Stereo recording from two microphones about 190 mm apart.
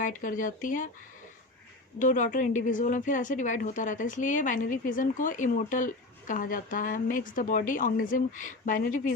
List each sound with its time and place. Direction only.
0.0 s speech: 45° left (ahead or behind)
2.0 s speech: 40° left (ahead or behind)